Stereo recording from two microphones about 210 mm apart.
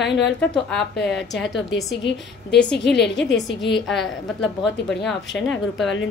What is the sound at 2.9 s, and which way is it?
Speech, 55° left (ahead or behind).